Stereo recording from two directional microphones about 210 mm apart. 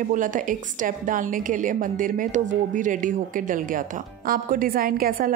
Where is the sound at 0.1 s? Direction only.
40° right (ahead or behind).